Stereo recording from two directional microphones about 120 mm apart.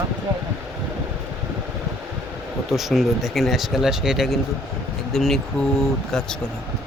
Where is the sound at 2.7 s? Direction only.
Centre (ahead or behind).